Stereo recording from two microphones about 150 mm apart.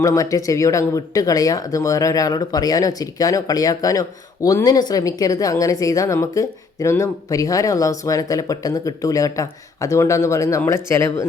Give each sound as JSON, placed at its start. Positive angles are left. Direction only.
{"t": 0.0, "sound": "speech", "side_deg": 20}